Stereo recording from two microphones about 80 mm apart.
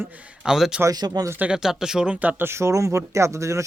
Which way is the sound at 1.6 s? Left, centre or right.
Centre.